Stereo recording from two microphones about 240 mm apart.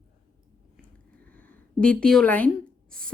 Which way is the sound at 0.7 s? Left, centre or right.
Centre.